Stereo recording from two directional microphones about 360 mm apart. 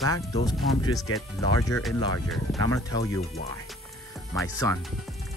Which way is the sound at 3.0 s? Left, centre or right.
Left.